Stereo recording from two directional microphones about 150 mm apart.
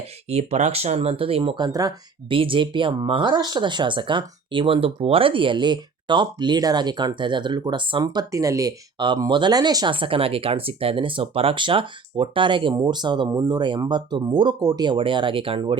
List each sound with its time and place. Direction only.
0.3 s speech: 45° right (ahead or behind)